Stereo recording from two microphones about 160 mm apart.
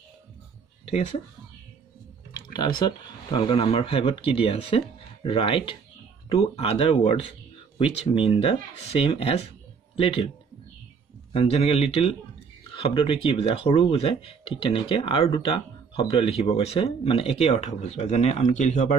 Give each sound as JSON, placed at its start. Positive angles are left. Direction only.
{"t": 2.3, "sound": "speech", "side_deg": 30}
{"t": 11.3, "sound": "speech", "side_deg": 40}